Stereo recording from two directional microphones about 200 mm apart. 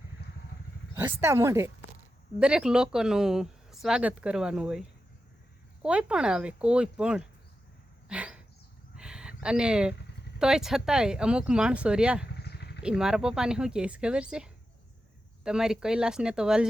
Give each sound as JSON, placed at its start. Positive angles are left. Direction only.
{"t": 0.9, "sound": "speech", "side_deg": -10}
{"t": 8.0, "sound": "dog", "side_deg": -5}
{"t": 9.0, "sound": "a sound", "side_deg": -5}
{"t": 10.3, "sound": "speech", "side_deg": -5}
{"t": 12.4, "sound": "vehicle", "side_deg": 55}
{"t": 12.8, "sound": "speech", "side_deg": -5}